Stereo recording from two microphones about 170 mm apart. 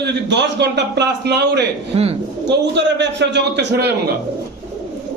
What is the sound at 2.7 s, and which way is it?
A man's voice, 90° right.